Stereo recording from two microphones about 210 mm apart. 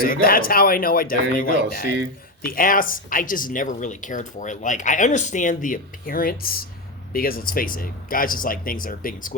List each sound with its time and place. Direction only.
0.0 s speech: 45° left (ahead or behind)